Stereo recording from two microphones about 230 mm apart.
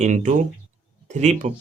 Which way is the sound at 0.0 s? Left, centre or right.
Right.